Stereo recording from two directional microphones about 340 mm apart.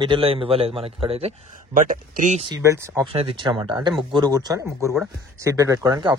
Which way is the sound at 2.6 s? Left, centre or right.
Centre.